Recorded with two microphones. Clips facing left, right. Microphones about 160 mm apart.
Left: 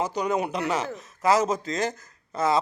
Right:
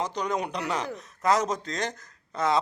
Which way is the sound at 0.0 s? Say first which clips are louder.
Left 3 dB; 10° left (ahead or behind).